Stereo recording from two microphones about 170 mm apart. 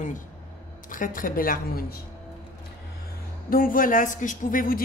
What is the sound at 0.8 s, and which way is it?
Speech, 50° left (ahead or behind).